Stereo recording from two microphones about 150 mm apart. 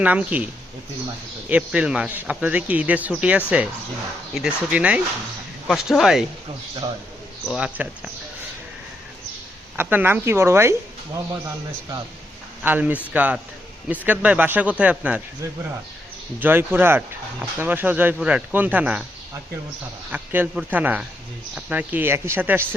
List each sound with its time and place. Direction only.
0.0 s speech: 10° right (ahead or behind)
1.5 s speech: 10° right (ahead or behind)
7.4 s speech: 5° right (ahead or behind)
9.7 s speech: 10° right (ahead or behind)
12.6 s speech: 10° right (ahead or behind)
16.4 s speech: 15° right (ahead or behind)
20.1 s speech: 10° right (ahead or behind)